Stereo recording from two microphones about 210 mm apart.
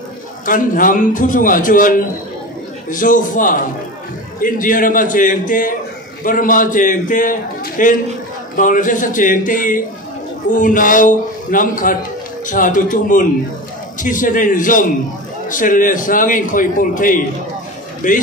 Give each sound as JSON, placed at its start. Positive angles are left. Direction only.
{"t": 0.5, "sound": "a man's voice", "side_deg": 40}